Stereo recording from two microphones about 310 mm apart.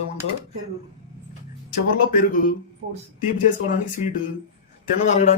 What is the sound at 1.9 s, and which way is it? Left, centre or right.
Speech, left.